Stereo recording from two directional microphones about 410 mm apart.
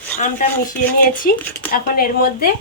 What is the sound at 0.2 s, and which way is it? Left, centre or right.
A woman's voice, centre.